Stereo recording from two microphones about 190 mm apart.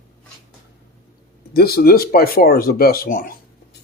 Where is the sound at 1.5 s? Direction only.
55° left (ahead or behind).